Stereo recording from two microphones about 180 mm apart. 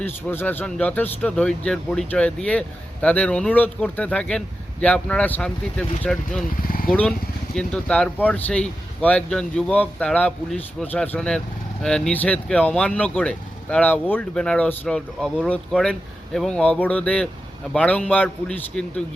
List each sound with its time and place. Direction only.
0.0 s speech: 10° left (ahead or behind)
6.7 s a sound: 50° left (ahead or behind)
7.5 s speech: 5° left (ahead or behind)